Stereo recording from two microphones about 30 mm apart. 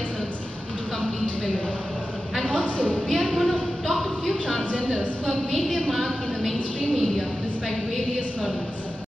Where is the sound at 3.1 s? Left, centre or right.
Centre.